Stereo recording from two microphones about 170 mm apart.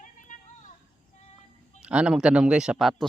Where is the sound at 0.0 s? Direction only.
50° left (ahead or behind).